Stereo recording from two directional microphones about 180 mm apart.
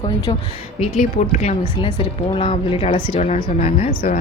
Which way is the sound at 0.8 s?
40° left (ahead or behind).